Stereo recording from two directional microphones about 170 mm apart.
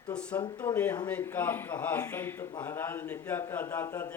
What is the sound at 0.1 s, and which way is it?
Speech, 5° left (ahead or behind).